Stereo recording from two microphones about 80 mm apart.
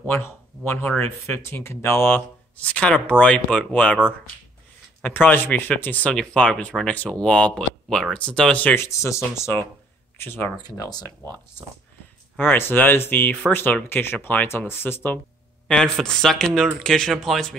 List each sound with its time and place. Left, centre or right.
0.1 s speech: left
5.0 s speech: left
6.1 s speech: centre
8.7 s speech: left
10.6 s speech: left
12.4 s speech: left
15.7 s speech: centre